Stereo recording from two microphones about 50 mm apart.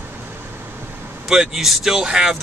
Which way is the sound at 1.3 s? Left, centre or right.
Centre.